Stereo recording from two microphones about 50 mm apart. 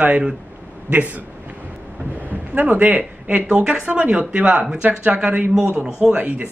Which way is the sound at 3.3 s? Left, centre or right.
Centre.